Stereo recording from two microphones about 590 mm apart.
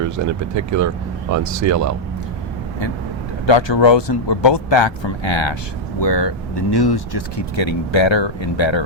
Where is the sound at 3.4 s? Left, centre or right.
Left.